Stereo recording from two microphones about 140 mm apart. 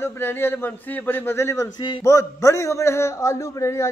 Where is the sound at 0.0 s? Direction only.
15° left (ahead or behind).